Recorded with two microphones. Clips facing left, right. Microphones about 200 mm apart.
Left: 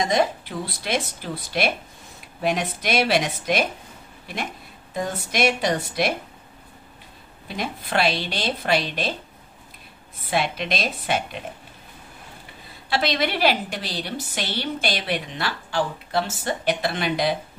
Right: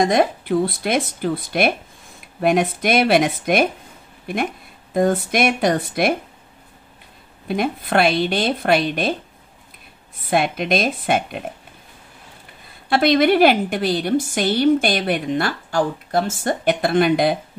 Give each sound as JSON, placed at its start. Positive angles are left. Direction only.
{"t": 0.0, "sound": "a woman's voice", "side_deg": -55}
{"t": 4.9, "sound": "a woman's voice", "side_deg": -55}
{"t": 7.4, "sound": "a woman's voice", "side_deg": -55}
{"t": 10.3, "sound": "a woman's voice", "side_deg": -50}
{"t": 12.9, "sound": "a woman's voice", "side_deg": -50}